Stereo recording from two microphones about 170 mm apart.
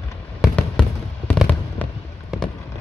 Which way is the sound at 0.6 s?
5° left (ahead or behind).